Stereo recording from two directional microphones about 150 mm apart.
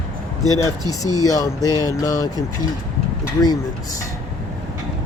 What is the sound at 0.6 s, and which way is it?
Speech, 20° left (ahead or behind).